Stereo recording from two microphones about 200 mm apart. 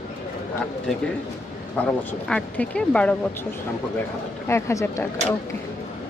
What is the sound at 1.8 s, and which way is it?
Speech, 5° left (ahead or behind).